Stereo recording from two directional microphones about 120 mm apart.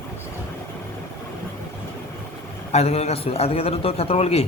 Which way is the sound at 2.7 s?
60° left (ahead or behind).